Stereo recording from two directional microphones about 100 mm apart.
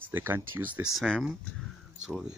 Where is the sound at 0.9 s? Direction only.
Centre (ahead or behind).